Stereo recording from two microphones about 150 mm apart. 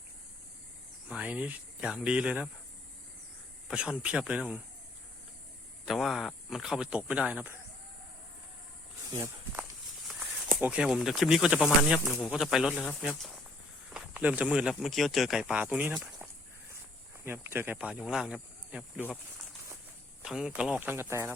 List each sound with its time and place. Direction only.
1.0 s speech: 5° right (ahead or behind)
3.7 s speech: 5° right (ahead or behind)
5.8 s speech: centre (ahead or behind)
9.0 s snake: 20° right (ahead or behind)
10.1 s a sound: centre (ahead or behind)
10.5 s speech: 10° right (ahead or behind)
17.2 s speech: 15° right (ahead or behind)
18.9 s speech: 10° left (ahead or behind)
20.2 s speech: centre (ahead or behind); by 21.3 s 15° right (ahead or behind)